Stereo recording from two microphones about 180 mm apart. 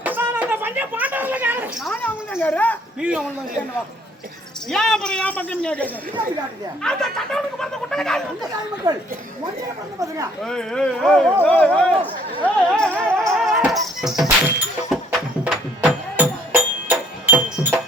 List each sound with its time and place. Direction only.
0.0 s a sound: 10° right (ahead or behind)
1.9 s a sound: 10° left (ahead or behind)
3.0 s speech: 5° right (ahead or behind)
4.7 s speech: centre (ahead or behind)
8.9 s a woman's voice: 20° right (ahead or behind)
10.4 s speech: 5° left (ahead or behind)
12.4 s music: 5° left (ahead or behind)